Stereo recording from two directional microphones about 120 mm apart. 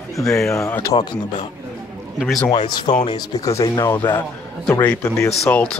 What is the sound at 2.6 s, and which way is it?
Speech, 60° left (ahead or behind).